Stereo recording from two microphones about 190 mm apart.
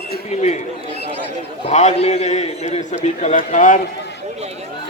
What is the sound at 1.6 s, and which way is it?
A man's voice, 35° left (ahead or behind).